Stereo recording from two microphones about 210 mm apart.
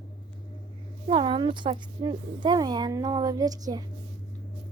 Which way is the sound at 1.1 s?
25° right (ahead or behind).